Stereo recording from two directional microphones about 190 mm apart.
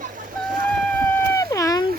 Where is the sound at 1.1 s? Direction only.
15° left (ahead or behind).